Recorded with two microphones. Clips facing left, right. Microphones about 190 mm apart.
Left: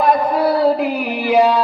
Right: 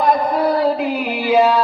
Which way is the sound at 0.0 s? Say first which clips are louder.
Left 1 dB; 10° left (ahead or behind).